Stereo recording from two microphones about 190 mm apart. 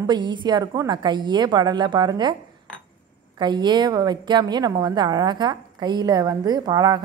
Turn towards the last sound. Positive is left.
turn(degrees=-20)  # may be behind; listen again after turning